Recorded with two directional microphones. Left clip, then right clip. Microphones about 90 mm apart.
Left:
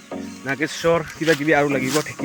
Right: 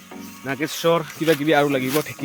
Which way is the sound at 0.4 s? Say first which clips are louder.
Left 1 dB; 20° right (ahead or behind).